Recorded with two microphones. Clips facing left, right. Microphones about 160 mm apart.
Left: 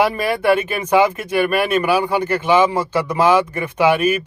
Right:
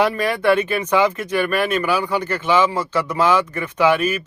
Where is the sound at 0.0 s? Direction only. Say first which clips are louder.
Left 1 dB; 10° left (ahead or behind).